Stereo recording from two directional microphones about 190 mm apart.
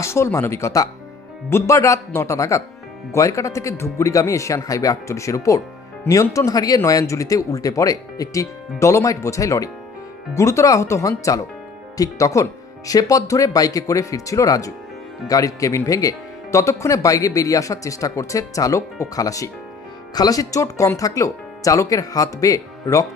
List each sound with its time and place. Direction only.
0.0 s speech: 15° left (ahead or behind)